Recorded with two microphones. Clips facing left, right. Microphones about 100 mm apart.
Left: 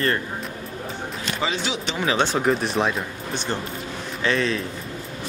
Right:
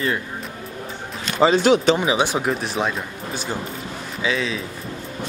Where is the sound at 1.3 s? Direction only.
40° right (ahead or behind).